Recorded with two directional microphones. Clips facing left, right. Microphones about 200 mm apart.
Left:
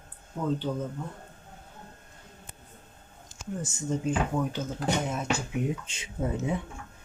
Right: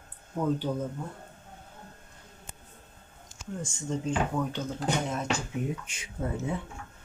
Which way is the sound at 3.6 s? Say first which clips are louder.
Left 2 dB; 5° left (ahead or behind).